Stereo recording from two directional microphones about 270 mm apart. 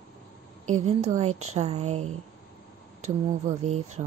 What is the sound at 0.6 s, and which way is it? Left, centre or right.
A woman's voice, right.